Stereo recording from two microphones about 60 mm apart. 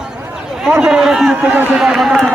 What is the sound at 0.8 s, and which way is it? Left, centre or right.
Speech, centre.